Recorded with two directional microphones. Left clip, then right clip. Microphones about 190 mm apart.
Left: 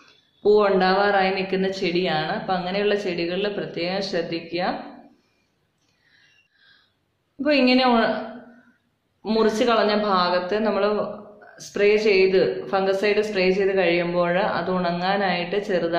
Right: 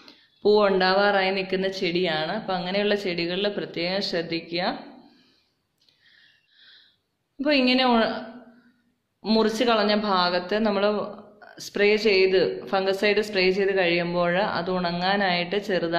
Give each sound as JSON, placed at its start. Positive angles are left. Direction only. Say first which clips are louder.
{"t": 0.0, "sound": "a woman's voice", "louder": "left 2 dB", "side_deg": -45}
{"t": 7.4, "sound": "a woman's voice", "louder": "left 2 dB", "side_deg": -40}
{"t": 9.2, "sound": "a woman's voice", "louder": "left 2 dB", "side_deg": -40}